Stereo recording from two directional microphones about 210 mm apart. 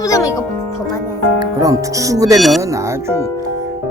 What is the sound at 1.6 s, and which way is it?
Speech, 15° right (ahead or behind).